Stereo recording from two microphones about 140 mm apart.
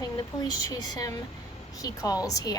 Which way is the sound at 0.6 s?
25° left (ahead or behind).